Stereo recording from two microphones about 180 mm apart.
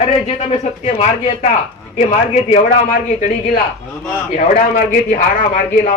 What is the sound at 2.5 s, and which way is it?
Speech, 40° left (ahead or behind).